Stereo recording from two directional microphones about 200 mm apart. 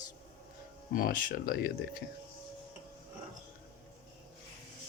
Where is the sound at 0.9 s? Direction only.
45° left (ahead or behind).